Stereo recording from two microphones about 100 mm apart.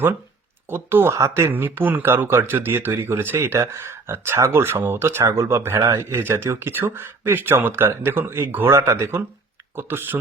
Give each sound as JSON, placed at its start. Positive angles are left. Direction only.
{"t": 0.7, "sound": "speech", "side_deg": -20}